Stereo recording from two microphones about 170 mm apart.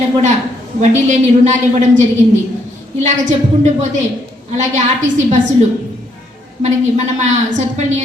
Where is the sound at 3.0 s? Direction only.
45° right (ahead or behind).